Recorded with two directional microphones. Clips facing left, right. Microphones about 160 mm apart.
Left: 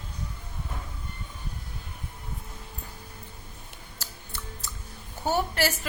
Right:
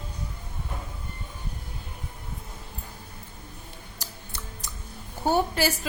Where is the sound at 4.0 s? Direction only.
15° right (ahead or behind).